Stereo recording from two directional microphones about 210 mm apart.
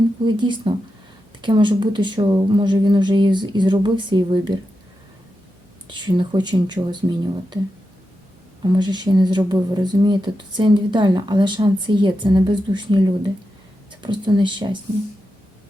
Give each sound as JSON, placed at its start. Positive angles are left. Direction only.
{"t": 0.3, "sound": "speech", "side_deg": -20}
{"t": 5.9, "sound": "speech", "side_deg": -20}
{"t": 8.6, "sound": "speech", "side_deg": -20}